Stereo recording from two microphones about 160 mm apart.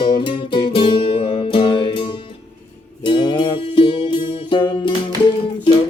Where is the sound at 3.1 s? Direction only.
30° left (ahead or behind).